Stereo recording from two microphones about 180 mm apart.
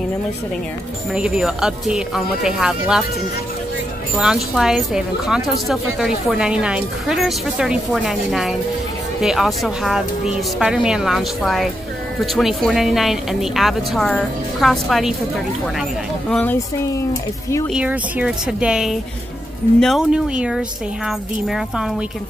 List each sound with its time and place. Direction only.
1.1 s speech: 5° right (ahead or behind)
4.2 s speech: 5° right (ahead or behind)
17.7 s speech: 5° right (ahead or behind)